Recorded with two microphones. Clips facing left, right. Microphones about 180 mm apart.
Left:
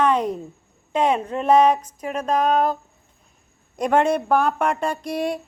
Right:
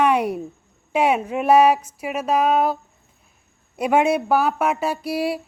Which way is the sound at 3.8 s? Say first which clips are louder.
Right 1 dB; 10° right (ahead or behind).